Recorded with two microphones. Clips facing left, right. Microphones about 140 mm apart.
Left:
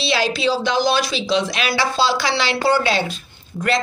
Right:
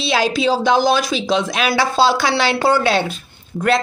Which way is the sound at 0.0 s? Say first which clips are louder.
Right 2 dB; 50° right (ahead or behind).